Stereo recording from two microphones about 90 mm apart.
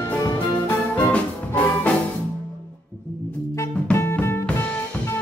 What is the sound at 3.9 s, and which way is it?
Music, 30° left (ahead or behind).